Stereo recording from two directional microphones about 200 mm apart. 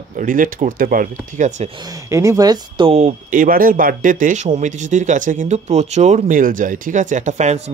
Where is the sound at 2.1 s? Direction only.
15° right (ahead or behind).